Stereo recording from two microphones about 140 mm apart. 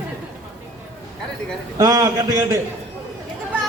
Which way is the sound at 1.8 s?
25° right (ahead or behind).